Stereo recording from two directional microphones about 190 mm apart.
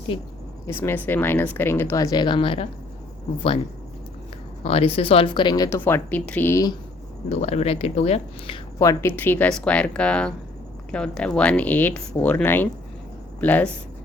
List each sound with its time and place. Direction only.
0.7 s speech: 10° left (ahead or behind); by 2.6 s 30° left (ahead or behind)
4.6 s speech: 30° left (ahead or behind)
7.3 s speech: 35° left (ahead or behind); by 13.7 s 10° left (ahead or behind)